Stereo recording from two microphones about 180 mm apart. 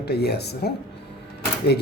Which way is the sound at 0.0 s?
65° left (ahead or behind).